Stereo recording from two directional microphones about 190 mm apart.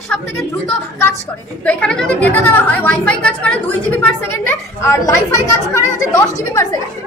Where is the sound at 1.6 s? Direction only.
5° left (ahead or behind).